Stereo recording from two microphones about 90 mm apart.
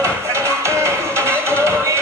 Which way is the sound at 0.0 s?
30° right (ahead or behind).